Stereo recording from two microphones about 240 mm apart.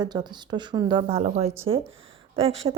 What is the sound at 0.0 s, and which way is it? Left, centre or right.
Speech, centre.